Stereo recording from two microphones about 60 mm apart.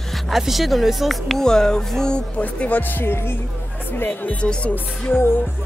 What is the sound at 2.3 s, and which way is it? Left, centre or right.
Speech, left.